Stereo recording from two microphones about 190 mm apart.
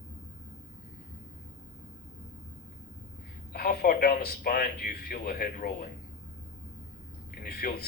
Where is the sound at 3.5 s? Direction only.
50° left (ahead or behind).